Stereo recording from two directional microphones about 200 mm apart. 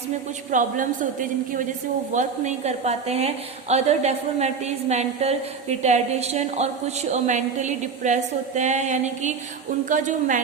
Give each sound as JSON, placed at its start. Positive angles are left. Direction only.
{"t": 0.5, "sound": "a woman's voice", "side_deg": -40}